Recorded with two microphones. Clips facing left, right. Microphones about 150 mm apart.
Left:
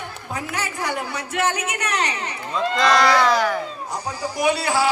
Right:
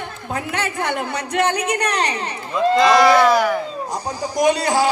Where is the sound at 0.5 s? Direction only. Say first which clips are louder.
Right 3 dB; 65° right (ahead or behind).